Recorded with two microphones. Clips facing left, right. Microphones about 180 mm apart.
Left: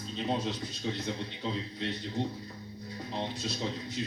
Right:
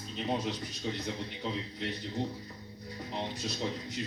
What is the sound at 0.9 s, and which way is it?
Speech, 15° right (ahead or behind).